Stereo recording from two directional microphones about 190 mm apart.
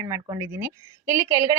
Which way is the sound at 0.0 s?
15° right (ahead or behind).